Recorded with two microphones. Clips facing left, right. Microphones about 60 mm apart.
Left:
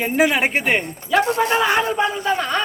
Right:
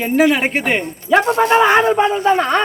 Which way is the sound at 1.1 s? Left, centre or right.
Right.